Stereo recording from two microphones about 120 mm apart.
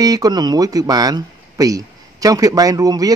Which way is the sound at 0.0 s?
30° right (ahead or behind).